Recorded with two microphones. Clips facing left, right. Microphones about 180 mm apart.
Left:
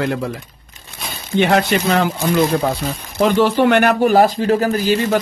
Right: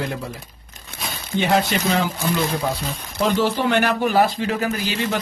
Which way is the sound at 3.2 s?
65° left (ahead or behind).